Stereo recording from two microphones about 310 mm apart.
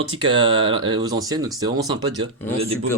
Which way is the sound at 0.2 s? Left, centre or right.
Centre.